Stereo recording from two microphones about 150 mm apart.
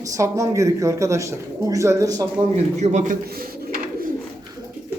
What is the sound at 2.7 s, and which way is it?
Speech, 50° right (ahead or behind).